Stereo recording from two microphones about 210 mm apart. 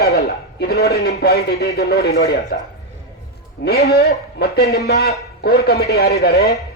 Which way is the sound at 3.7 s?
50° left (ahead or behind).